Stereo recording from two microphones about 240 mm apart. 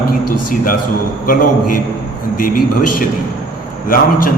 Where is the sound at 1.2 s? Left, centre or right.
Left.